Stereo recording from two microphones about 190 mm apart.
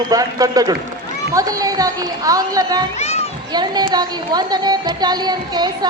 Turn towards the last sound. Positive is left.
turn(degrees=-20)  # may be behind; listen again after turning